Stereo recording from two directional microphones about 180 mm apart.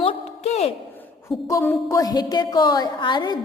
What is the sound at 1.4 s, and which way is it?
A woman's voice, 15° left (ahead or behind).